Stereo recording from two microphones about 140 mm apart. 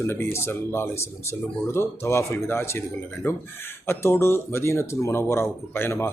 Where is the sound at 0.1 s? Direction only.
15° left (ahead or behind).